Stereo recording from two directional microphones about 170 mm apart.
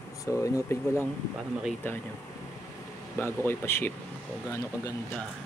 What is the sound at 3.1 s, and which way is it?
Speech, 15° left (ahead or behind).